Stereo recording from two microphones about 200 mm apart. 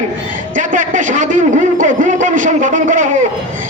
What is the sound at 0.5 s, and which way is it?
A man's voice, 40° right (ahead or behind).